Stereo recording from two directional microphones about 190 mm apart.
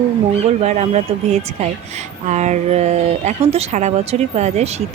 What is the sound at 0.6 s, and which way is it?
Speech, 35° right (ahead or behind).